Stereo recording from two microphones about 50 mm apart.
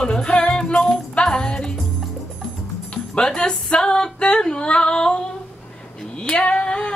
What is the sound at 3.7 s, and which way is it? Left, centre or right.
Female singing, centre.